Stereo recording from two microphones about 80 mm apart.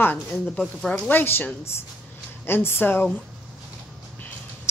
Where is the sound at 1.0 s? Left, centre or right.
Left.